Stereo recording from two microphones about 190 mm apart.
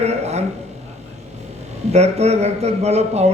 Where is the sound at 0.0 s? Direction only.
35° right (ahead or behind).